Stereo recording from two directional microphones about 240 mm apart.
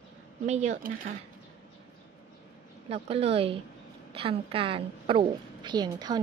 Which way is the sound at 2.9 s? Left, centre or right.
Right.